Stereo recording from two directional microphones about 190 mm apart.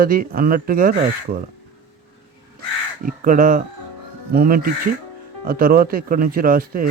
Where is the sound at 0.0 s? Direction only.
50° right (ahead or behind).